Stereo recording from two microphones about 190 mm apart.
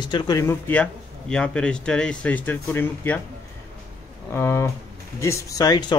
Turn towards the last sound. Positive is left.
turn(degrees=20)  # may be behind; listen again after turning